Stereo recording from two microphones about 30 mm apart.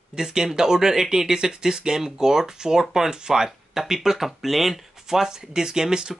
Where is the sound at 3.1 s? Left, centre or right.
Right.